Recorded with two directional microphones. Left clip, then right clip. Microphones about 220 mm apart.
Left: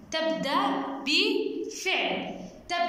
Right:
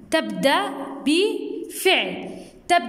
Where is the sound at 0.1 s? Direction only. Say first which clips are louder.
Right 7 dB; 45° right (ahead or behind).